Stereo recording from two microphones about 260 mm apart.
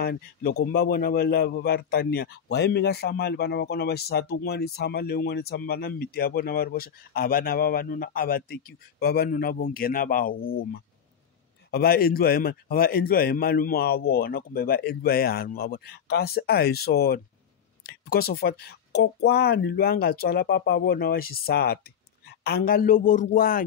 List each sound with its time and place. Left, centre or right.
0.0 s a man's voice: left